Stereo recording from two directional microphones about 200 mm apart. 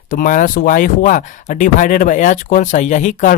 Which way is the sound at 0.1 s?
45° left (ahead or behind).